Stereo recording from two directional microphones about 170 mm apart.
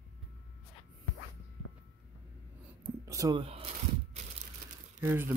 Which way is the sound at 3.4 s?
35° right (ahead or behind).